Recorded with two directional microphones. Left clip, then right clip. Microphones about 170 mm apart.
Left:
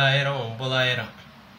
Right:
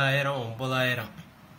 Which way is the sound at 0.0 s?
35° right (ahead or behind).